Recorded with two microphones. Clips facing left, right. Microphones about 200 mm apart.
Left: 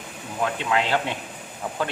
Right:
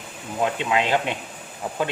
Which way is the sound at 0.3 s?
20° right (ahead or behind).